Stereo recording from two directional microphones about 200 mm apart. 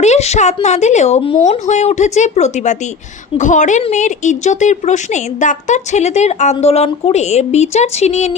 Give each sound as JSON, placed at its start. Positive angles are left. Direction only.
{"t": 0.0, "sound": "speech", "side_deg": 35}